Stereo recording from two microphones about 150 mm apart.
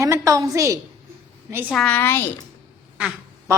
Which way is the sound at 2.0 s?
15° left (ahead or behind).